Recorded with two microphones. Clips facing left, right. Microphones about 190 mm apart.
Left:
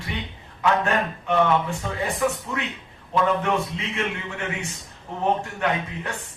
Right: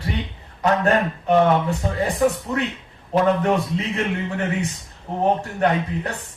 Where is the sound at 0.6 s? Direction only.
40° right (ahead or behind).